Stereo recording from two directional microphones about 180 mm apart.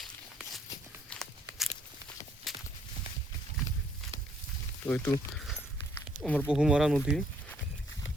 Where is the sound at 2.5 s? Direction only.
Centre (ahead or behind).